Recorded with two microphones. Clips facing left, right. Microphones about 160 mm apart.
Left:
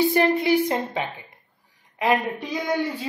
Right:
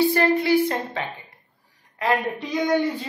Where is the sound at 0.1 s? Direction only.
20° left (ahead or behind).